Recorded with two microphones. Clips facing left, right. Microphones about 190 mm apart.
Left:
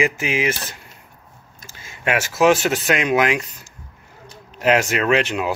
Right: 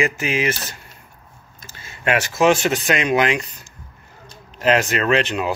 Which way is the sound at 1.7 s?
10° left (ahead or behind).